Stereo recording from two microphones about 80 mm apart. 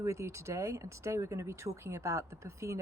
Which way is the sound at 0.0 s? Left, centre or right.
Right.